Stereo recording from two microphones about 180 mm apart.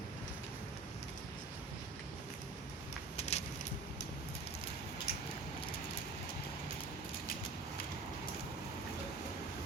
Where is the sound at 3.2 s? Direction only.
35° left (ahead or behind).